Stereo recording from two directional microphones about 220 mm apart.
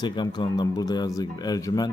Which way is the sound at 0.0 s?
20° left (ahead or behind).